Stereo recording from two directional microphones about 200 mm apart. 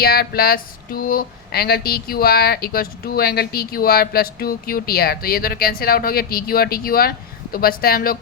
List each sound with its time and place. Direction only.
0.0 s speech: 50° left (ahead or behind)